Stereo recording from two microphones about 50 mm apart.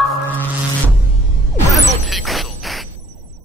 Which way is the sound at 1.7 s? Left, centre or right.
Centre.